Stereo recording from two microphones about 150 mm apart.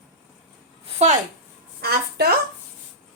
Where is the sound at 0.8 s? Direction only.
50° right (ahead or behind).